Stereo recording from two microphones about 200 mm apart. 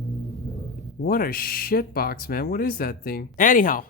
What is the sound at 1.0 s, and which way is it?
Speech, 45° left (ahead or behind).